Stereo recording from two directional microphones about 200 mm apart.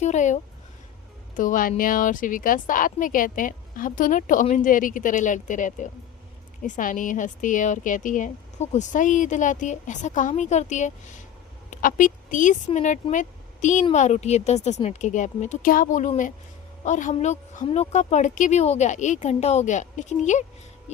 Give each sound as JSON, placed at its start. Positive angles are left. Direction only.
{"t": 0.0, "sound": "a woman's voice", "side_deg": 35}
{"t": 1.4, "sound": "a woman's voice", "side_deg": 40}